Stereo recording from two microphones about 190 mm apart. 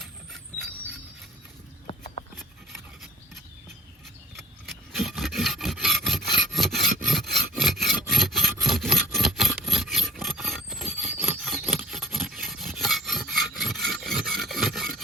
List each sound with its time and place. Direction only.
1.9 s clip-clop: 35° left (ahead or behind)
4.9 s filing: centre (ahead or behind)
7.5 s rub: centre (ahead or behind)
11.2 s filing: centre (ahead or behind)